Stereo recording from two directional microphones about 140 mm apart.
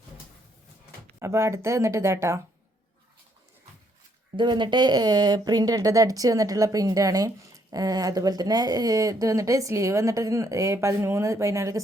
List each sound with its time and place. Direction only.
1.2 s speech: 20° right (ahead or behind)
4.4 s speech: 35° right (ahead or behind)